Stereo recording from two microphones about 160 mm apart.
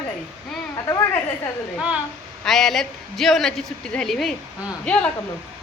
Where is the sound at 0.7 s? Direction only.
20° left (ahead or behind).